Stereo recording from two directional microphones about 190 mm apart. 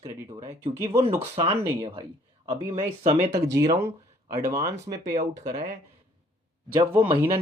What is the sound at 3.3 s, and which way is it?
Speech, 15° right (ahead or behind).